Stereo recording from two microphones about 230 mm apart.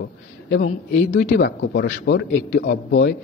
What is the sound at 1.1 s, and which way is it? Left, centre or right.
A man's voice, left.